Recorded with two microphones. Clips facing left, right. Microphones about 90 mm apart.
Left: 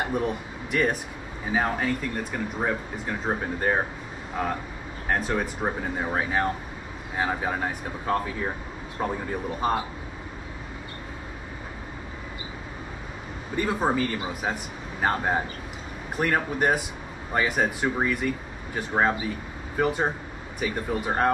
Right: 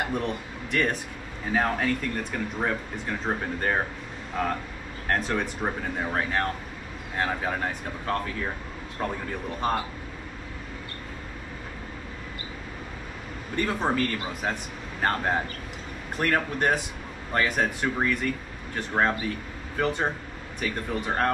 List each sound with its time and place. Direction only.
0.0 s speech: 5° left (ahead or behind)
13.6 s speech: 10° left (ahead or behind)